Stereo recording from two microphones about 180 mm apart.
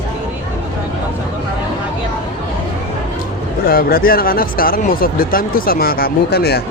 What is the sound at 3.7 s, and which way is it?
Speech, 55° left (ahead or behind).